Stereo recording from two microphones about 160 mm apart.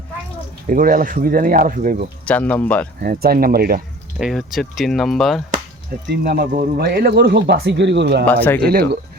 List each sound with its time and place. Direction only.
0.7 s speech: 60° right (ahead or behind)
2.2 s speech: 10° left (ahead or behind)
3.0 s speech: 70° right (ahead or behind)
4.2 s speech: centre (ahead or behind)
6.1 s speech: 70° right (ahead or behind); by 8.2 s 90° right
8.3 s speech: 10° left (ahead or behind)
8.6 s speech: 85° right